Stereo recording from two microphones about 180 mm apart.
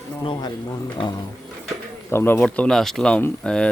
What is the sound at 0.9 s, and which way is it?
Speech, 25° left (ahead or behind).